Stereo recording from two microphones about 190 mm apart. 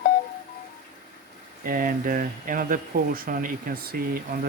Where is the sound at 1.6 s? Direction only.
50° right (ahead or behind).